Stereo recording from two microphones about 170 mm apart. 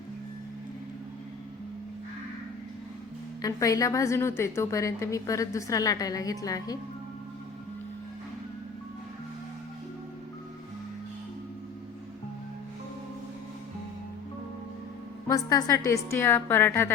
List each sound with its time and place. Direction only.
3.4 s a woman's voice: 20° left (ahead or behind)
15.3 s a woman's voice: 20° left (ahead or behind)